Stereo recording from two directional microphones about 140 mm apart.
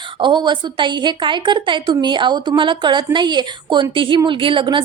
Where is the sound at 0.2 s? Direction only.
35° right (ahead or behind).